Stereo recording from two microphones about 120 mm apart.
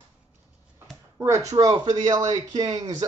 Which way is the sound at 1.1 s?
25° right (ahead or behind).